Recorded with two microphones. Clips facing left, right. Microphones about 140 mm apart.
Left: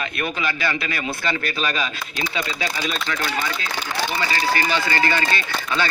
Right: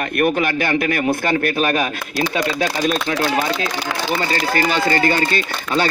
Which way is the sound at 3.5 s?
80° right.